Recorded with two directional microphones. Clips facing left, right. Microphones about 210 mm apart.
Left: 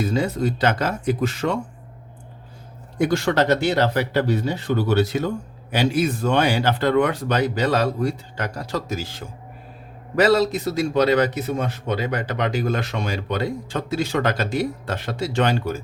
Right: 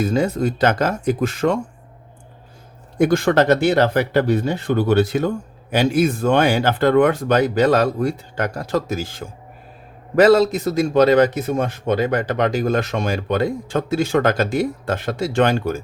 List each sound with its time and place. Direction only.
0.0 s speech: 50° right (ahead or behind)
3.0 s speech: 50° right (ahead or behind)